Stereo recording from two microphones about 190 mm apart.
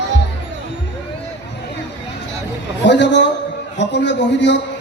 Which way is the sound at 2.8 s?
65° left (ahead or behind).